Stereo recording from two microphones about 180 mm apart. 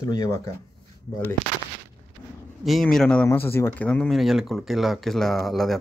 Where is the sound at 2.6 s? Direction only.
Centre (ahead or behind).